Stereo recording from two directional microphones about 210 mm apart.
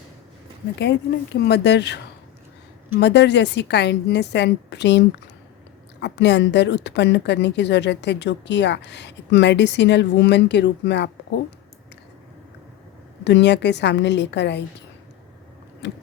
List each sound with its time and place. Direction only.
1.4 s speech: 50° left (ahead or behind)
3.0 s a woman's voice: 55° left (ahead or behind)
13.2 s a woman's voice: 55° left (ahead or behind)
15.8 s gears: 55° left (ahead or behind)